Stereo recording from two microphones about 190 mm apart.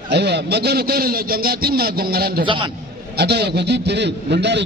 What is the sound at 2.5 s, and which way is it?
Speech, 25° right (ahead or behind).